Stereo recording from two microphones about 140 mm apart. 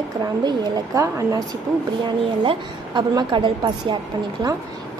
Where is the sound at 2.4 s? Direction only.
35° right (ahead or behind).